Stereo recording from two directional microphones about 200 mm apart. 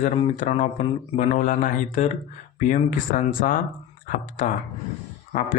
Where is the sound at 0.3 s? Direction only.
40° left (ahead or behind).